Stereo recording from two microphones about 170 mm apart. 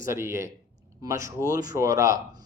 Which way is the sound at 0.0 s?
15° right (ahead or behind).